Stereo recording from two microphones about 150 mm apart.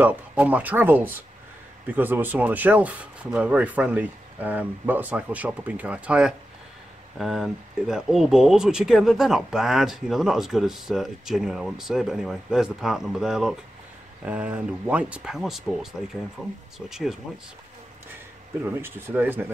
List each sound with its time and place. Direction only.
0.0 s speech: 10° right (ahead or behind)
18.7 s speech: 15° right (ahead or behind)